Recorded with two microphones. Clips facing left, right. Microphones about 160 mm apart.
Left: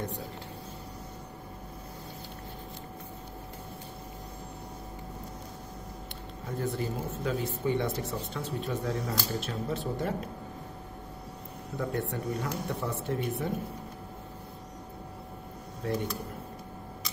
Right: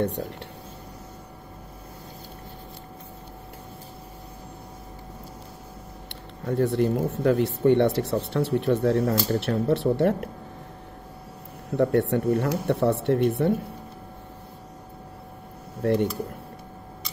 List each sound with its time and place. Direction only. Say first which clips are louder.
6.4 s speech: right 10 dB; 70° right (ahead or behind)
11.7 s speech: right 11 dB; 70° right (ahead or behind)
15.8 s speech: right 10 dB; 65° right (ahead or behind)